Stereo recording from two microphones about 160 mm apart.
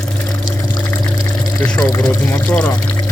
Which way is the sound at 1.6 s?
5° left (ahead or behind).